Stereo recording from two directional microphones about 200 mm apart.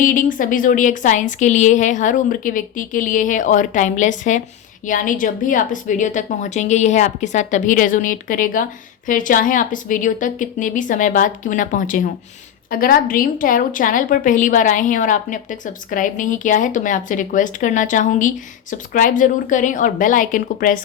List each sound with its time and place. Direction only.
0.0 s a woman's voice: 40° left (ahead or behind)